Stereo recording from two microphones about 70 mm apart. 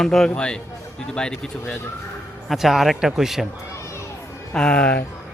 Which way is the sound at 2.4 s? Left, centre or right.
Centre.